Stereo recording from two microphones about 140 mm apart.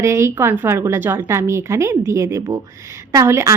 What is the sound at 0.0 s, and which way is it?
A woman's voice, 20° right (ahead or behind).